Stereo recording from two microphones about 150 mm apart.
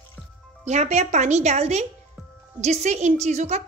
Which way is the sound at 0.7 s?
50° right (ahead or behind).